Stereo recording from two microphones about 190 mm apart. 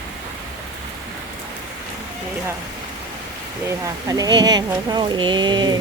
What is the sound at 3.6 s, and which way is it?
Speech, 15° right (ahead or behind).